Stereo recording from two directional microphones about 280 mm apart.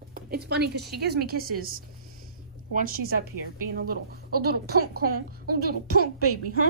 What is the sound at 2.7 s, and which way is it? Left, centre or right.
A woman's voice, right.